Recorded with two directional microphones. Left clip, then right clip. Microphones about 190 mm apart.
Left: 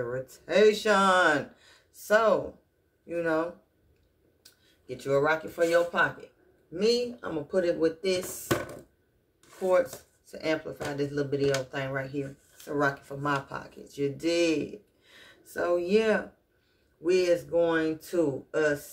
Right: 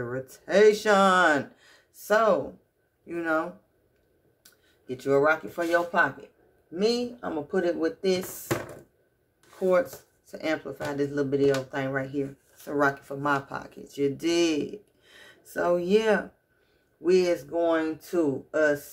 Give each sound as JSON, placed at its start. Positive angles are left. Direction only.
{"t": 0.0, "sound": "speech", "side_deg": -40}
{"t": 5.0, "sound": "speech", "side_deg": -40}
{"t": 6.8, "sound": "speech", "side_deg": -30}
{"t": 10.3, "sound": "speech", "side_deg": -40}